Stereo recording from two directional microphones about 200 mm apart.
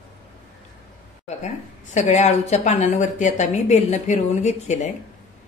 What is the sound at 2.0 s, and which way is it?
Speech, 35° left (ahead or behind).